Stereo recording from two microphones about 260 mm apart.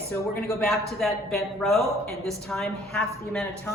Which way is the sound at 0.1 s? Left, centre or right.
Centre.